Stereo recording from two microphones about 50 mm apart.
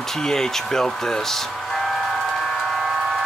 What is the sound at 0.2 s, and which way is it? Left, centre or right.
Speech, centre.